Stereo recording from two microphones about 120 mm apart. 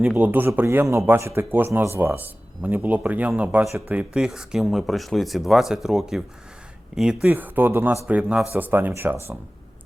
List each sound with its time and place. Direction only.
0.0 s speech: 15° right (ahead or behind)